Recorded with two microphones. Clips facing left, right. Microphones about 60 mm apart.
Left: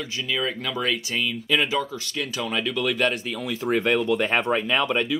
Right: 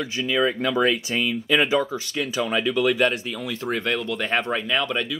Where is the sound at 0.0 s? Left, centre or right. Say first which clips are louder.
Right 5 dB; right; by 3.7 s centre.